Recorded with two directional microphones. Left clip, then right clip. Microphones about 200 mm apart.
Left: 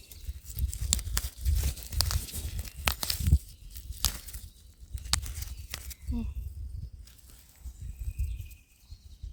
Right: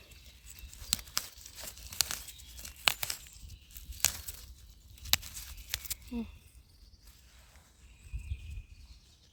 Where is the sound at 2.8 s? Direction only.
Centre (ahead or behind).